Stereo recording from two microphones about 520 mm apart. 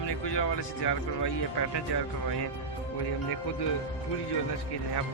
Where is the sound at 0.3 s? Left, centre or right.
Left.